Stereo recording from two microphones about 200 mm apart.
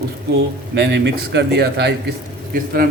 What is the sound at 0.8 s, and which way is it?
A man's voice, 60° right (ahead or behind).